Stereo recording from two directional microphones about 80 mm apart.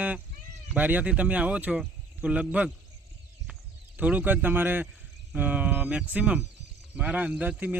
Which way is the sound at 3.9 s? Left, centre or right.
Centre.